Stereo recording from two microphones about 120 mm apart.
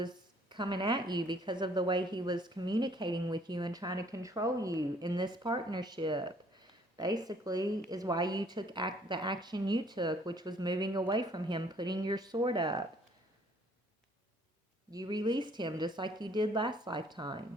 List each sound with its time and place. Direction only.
0.0 s a woman's voice: 40° right (ahead or behind)
14.8 s a woman's voice: 35° right (ahead or behind)